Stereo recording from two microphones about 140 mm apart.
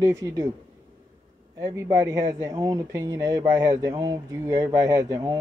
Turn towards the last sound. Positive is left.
turn(degrees=-25)  # may be behind; listen again after turning